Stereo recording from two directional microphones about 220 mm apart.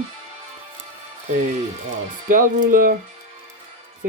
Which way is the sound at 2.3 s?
40° right (ahead or behind).